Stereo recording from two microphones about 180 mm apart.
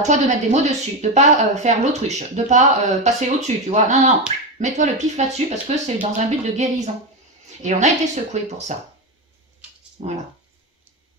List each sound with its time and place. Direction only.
0.0 s a woman's voice: 40° right (ahead or behind)